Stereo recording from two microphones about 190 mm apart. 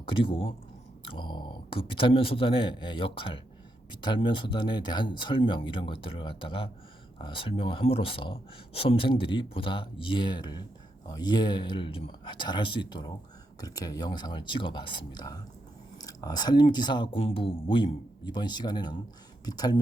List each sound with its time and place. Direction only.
0.1 s speech: 25° left (ahead or behind)